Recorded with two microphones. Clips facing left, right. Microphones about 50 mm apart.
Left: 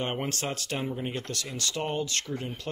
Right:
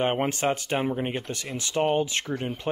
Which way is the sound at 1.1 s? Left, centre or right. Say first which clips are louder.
Right 3 dB; right.